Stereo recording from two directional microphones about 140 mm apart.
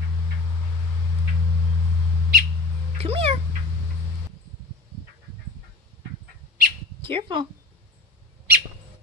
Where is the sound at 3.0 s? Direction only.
45° right (ahead or behind).